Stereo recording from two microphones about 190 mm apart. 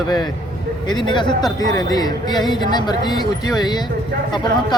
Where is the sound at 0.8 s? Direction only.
25° left (ahead or behind).